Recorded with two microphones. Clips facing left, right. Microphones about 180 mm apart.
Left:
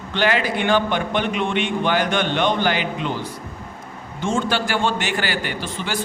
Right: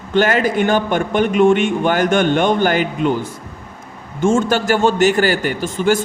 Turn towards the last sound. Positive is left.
turn(degrees=-45)  # may be behind; listen again after turning